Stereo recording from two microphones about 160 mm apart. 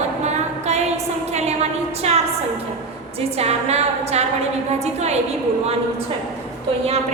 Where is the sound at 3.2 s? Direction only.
40° right (ahead or behind).